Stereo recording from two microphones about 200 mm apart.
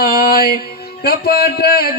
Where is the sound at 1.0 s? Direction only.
50° left (ahead or behind).